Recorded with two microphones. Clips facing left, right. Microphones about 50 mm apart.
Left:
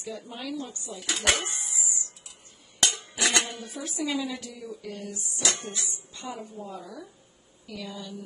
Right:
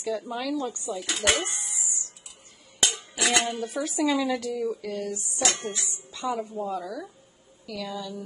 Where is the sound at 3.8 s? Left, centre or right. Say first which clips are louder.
Right 5 dB; right.